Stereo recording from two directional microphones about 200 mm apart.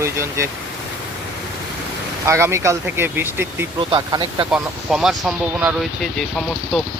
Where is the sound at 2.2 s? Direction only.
15° right (ahead or behind).